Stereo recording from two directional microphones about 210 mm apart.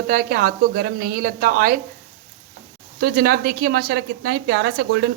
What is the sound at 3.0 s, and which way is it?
A woman's voice, 45° right (ahead or behind).